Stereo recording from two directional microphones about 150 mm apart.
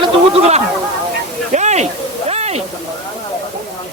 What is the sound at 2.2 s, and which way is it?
Waterfall, 45° right (ahead or behind).